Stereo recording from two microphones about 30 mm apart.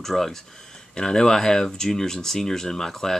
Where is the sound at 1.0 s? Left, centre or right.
Left.